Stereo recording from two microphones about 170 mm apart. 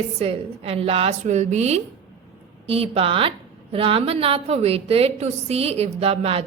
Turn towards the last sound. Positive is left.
turn(degrees=-35)  # may be behind; listen again after turning